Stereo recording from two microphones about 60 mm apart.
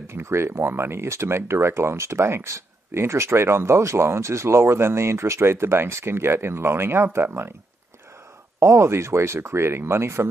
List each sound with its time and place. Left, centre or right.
0.0 s speech: right
8.5 s speech: right